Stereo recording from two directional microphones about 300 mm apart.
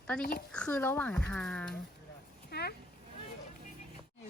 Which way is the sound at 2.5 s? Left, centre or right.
Left.